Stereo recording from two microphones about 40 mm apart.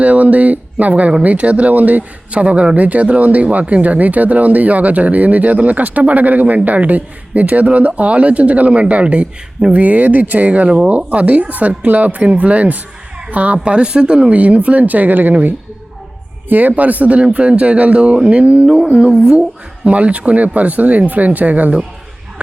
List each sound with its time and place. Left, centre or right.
0.0 s speech: right
10.7 s speech: right
19.1 s speech: centre
19.8 s speech: right